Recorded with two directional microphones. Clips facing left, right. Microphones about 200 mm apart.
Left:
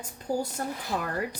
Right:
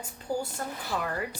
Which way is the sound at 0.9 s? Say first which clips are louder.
Even; 30° left (ahead or behind).